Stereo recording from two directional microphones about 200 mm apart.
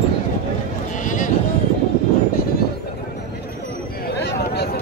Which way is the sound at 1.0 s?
40° left (ahead or behind).